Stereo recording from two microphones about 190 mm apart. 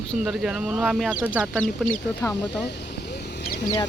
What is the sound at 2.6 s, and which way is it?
Vehicle, 60° left (ahead or behind).